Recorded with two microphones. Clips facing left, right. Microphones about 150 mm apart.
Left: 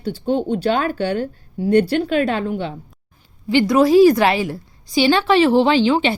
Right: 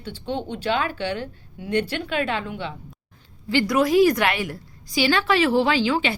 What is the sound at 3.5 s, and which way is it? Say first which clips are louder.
Speech: left 6 dB; 20° left (ahead or behind).